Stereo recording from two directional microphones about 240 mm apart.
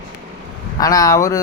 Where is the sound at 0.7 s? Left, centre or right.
Centre.